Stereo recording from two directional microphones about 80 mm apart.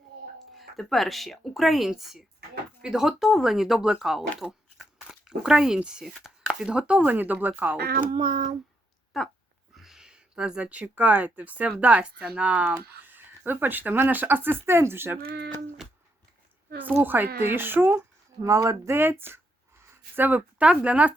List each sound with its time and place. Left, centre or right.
0.5 s speech: centre
9.1 s speech: centre; by 15.2 s right
17.0 s speech: right
18.4 s speech: right
18.9 s speech: right